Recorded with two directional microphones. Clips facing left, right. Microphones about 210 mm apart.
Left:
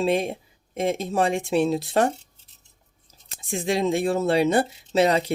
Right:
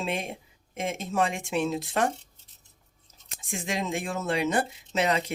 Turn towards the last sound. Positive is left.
turn(degrees=35)  # may be behind; listen again after turning